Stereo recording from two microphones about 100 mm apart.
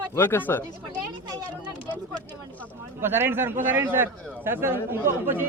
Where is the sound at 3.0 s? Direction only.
20° right (ahead or behind).